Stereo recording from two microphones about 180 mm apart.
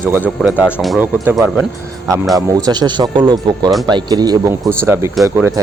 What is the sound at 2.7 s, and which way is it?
Speech, 25° right (ahead or behind).